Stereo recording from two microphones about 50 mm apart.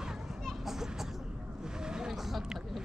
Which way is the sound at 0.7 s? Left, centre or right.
Centre.